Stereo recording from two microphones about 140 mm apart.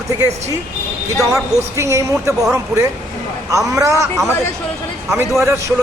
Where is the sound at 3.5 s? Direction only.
25° right (ahead or behind).